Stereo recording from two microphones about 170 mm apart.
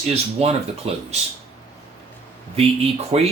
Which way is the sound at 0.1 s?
35° right (ahead or behind).